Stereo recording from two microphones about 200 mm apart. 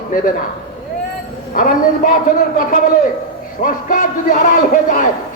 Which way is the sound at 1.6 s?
45° left (ahead or behind).